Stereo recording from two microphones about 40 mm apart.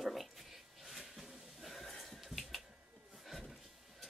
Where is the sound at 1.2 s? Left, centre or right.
Centre.